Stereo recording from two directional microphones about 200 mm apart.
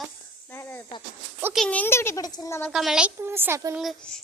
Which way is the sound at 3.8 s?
Centre (ahead or behind).